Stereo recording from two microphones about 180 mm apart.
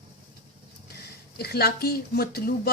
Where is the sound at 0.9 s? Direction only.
60° left (ahead or behind).